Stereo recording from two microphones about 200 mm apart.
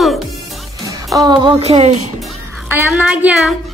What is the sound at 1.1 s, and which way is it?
Speech, 20° right (ahead or behind).